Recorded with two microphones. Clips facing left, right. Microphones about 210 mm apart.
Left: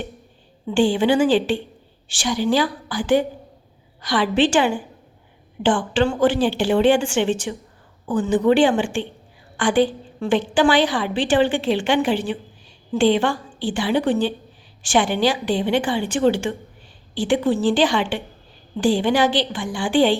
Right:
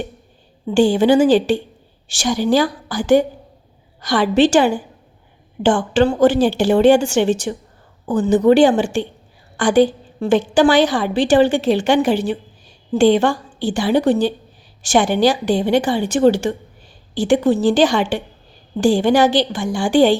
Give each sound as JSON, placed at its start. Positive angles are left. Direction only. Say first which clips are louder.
{"t": 0.7, "sound": "a woman's voice", "louder": "right 4 dB", "side_deg": -40}